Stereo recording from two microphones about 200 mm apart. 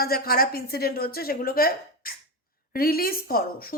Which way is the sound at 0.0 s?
50° left (ahead or behind).